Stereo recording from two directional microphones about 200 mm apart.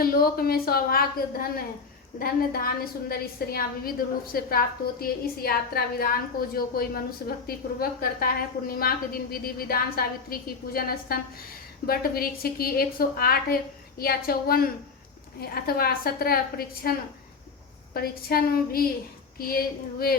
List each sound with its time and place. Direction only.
0.0 s a woman's voice: 50° left (ahead or behind)
2.1 s a woman's voice: 50° left (ahead or behind)
17.9 s a woman's voice: 50° left (ahead or behind)